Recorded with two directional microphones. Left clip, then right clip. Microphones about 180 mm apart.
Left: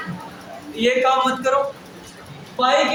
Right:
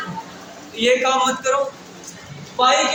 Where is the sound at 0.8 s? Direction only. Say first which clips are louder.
Even; 10° left (ahead or behind).